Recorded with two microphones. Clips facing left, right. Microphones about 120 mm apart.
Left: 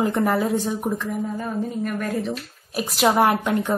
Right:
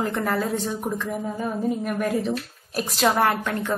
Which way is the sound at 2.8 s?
10° left (ahead or behind).